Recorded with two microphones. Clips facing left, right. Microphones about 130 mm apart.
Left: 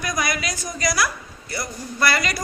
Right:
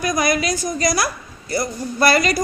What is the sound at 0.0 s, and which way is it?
A woman's voice, 25° right (ahead or behind).